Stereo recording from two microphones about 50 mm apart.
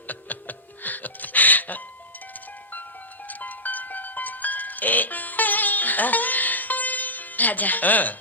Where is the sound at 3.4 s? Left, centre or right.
Left.